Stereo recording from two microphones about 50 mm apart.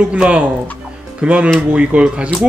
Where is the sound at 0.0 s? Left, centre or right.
Right.